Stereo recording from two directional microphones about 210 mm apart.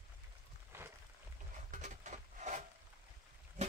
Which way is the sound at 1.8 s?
35° right (ahead or behind).